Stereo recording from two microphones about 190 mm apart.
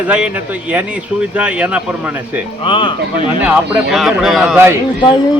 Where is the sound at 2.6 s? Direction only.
25° left (ahead or behind).